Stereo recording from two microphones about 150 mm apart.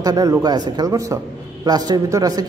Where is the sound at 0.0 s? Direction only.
25° right (ahead or behind).